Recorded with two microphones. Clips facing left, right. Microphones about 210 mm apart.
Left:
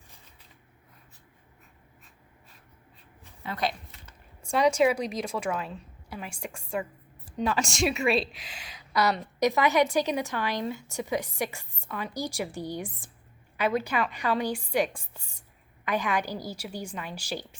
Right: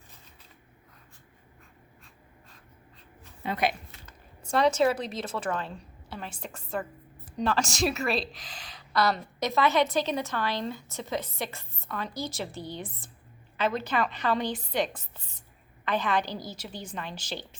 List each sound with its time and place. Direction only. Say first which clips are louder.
3.4 s speech: right 2 dB; 15° right (ahead or behind)
4.0 s a woman's voice: right 2 dB; 10° left (ahead or behind)
8.5 s a woman's voice: even; 10° left (ahead or behind)